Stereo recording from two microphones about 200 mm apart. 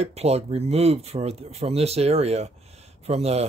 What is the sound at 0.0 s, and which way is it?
Speech, 30° right (ahead or behind).